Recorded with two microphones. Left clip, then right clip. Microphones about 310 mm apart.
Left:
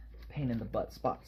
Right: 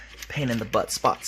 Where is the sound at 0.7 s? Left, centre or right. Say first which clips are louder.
Right 12 dB; right.